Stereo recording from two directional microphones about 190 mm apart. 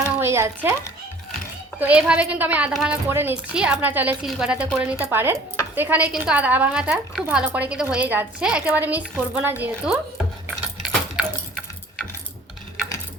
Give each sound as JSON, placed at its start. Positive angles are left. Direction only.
{"t": 0.0, "sound": "speech", "side_deg": -15}
{"t": 1.8, "sound": "a woman's voice", "side_deg": -5}
{"t": 10.8, "sound": "a sound", "side_deg": 0}